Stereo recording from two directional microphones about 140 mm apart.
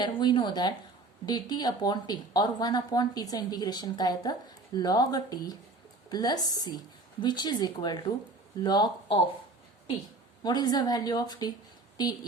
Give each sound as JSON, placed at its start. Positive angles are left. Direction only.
{"t": 0.0, "sound": "a woman's voice", "side_deg": 35}
{"t": 10.4, "sound": "a woman's voice", "side_deg": 30}